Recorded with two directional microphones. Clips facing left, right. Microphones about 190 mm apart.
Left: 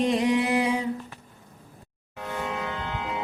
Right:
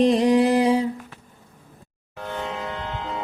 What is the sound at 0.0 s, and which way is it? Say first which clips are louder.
Music: right 6 dB; 35° right (ahead or behind).